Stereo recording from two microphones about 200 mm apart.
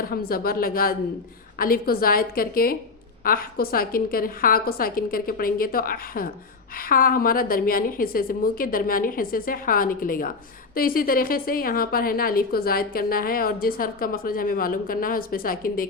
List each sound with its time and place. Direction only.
0.0 s a woman's voice: 50° left (ahead or behind)